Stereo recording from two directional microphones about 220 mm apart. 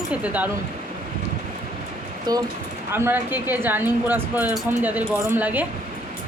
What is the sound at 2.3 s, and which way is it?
Speech, 20° right (ahead or behind).